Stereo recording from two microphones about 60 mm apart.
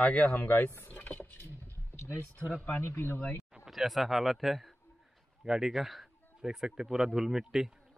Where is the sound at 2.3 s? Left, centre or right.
Left.